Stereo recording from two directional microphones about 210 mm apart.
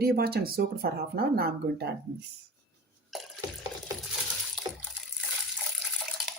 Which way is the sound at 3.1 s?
Centre (ahead or behind).